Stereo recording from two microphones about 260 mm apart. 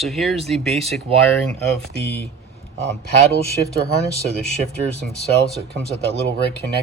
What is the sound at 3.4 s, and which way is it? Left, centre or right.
Speech, left.